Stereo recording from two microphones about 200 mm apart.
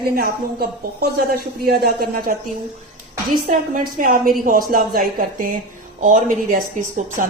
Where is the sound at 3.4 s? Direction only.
45° right (ahead or behind).